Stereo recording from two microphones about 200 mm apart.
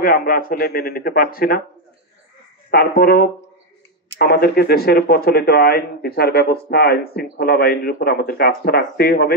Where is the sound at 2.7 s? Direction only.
50° left (ahead or behind).